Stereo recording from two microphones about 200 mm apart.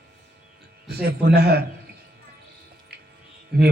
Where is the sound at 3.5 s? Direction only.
55° right (ahead or behind).